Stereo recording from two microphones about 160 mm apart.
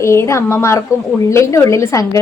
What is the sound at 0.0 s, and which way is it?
A woman's voice, 15° left (ahead or behind).